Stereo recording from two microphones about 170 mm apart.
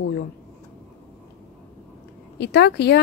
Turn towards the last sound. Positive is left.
turn(degrees=80)